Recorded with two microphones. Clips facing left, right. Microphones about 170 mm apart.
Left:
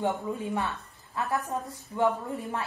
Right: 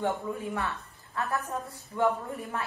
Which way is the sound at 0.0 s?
20° left (ahead or behind).